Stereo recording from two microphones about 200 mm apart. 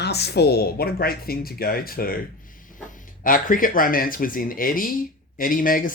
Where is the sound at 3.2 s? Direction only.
45° left (ahead or behind).